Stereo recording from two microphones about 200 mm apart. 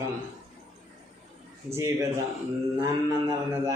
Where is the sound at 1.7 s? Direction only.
15° right (ahead or behind).